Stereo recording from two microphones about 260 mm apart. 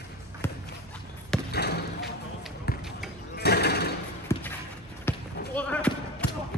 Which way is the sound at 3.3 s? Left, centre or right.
Left.